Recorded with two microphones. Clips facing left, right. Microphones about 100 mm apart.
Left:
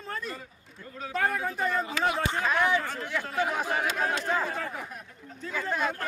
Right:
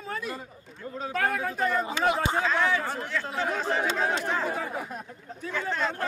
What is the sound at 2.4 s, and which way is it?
Speech, 15° left (ahead or behind).